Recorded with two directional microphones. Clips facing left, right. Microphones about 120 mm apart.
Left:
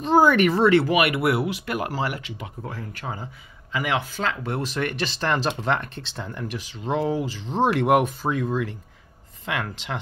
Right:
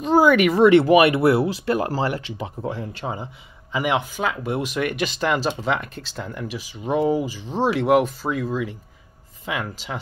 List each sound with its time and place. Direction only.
0.0 s speech: 5° right (ahead or behind)
0.7 s speech: 25° right (ahead or behind); by 9.9 s 5° right (ahead or behind)